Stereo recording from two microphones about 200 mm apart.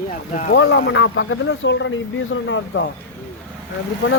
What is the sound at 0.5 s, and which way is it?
Speech, 65° left (ahead or behind).